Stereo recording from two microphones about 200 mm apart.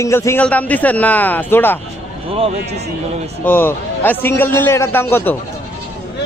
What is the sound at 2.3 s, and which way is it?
Speech, 30° right (ahead or behind).